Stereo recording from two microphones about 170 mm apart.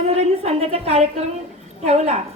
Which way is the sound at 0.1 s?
40° right (ahead or behind).